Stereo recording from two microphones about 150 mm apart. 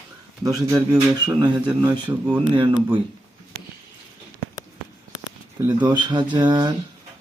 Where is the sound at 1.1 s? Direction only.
30° right (ahead or behind).